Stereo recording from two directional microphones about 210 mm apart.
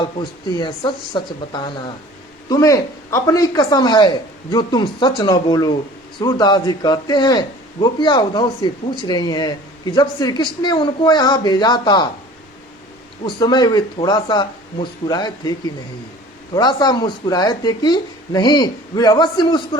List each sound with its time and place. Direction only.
0.0 s speech: 20° left (ahead or behind)
13.2 s speech: 20° left (ahead or behind)
16.6 s speech: 20° left (ahead or behind)